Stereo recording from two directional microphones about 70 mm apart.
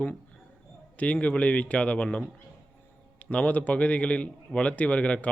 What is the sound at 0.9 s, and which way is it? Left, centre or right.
Speech, centre.